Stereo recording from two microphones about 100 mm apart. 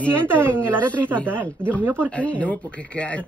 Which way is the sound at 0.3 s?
20° right (ahead or behind).